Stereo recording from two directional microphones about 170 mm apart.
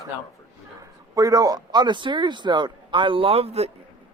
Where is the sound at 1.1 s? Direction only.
20° right (ahead or behind).